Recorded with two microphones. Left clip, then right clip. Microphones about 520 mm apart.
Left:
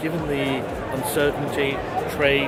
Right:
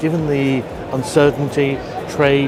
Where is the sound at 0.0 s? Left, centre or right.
Right.